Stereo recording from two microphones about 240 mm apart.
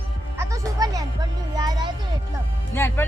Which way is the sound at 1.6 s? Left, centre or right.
Centre.